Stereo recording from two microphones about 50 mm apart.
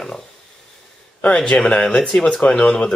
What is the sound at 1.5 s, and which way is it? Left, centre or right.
Speech, left.